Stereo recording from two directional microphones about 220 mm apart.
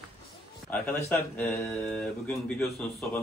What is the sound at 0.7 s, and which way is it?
Speech, 5° left (ahead or behind).